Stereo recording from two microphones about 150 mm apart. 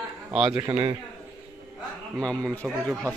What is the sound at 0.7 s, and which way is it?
Speech, 30° right (ahead or behind).